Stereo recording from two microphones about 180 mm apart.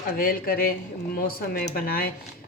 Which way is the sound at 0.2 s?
55° left (ahead or behind).